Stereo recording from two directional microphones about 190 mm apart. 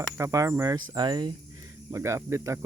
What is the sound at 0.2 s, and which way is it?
Speech, 15° right (ahead or behind).